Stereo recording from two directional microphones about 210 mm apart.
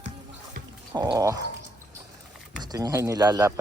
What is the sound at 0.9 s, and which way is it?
Speech, 15° right (ahead or behind).